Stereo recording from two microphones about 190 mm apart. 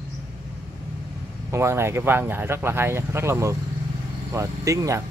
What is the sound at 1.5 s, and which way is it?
Speech, 15° right (ahead or behind).